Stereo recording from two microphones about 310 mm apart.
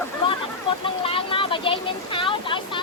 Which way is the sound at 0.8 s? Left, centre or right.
Centre.